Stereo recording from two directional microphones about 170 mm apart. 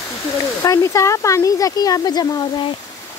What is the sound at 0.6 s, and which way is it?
Speech, 20° left (ahead or behind).